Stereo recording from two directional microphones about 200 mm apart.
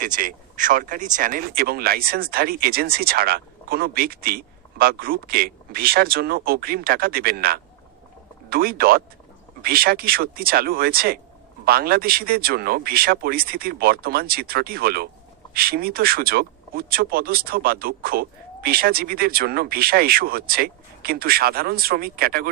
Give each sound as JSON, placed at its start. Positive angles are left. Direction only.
{"t": 0.0, "sound": "speech", "side_deg": -40}